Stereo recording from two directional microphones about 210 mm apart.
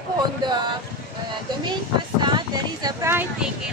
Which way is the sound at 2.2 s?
20° right (ahead or behind).